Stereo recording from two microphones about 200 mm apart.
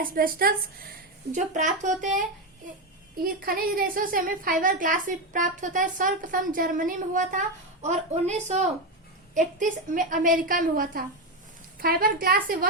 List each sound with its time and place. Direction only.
0.0 s a woman's voice: 45° right (ahead or behind)
3.4 s a woman's voice: 45° right (ahead or behind)